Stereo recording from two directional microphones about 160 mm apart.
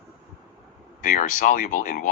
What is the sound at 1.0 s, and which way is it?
Speech, 55° left (ahead or behind).